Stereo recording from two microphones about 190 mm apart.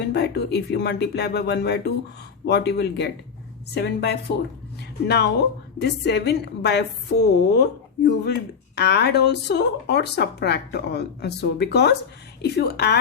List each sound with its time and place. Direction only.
0.1 s a woman's voice: 60° left (ahead or behind)